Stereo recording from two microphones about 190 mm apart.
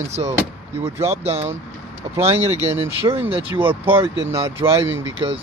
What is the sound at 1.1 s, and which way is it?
Speech, 35° right (ahead or behind).